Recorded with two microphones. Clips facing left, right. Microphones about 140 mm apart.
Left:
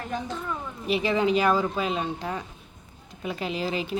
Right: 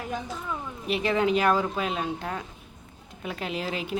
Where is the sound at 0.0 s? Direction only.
5° right (ahead or behind).